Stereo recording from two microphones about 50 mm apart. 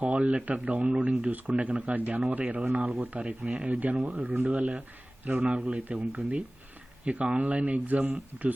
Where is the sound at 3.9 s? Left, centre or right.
Centre.